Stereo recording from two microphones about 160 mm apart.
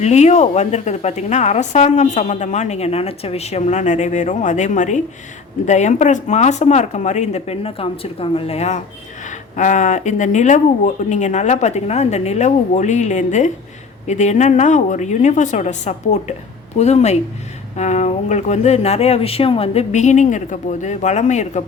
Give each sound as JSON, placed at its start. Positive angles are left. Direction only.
{"t": 0.0, "sound": "a woman's voice", "side_deg": 45}